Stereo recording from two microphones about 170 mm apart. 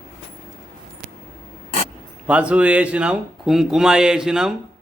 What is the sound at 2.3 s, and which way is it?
Speech, 5° right (ahead or behind).